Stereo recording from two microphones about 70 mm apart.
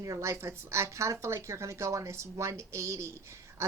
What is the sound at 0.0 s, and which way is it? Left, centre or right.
A woman's voice, right.